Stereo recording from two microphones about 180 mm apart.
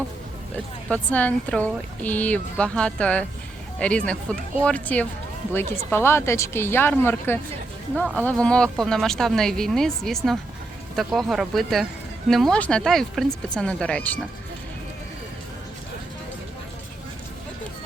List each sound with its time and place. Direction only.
0.5 s speech: 10° left (ahead or behind)